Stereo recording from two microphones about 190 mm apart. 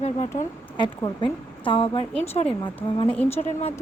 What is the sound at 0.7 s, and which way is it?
Speech, 25° left (ahead or behind).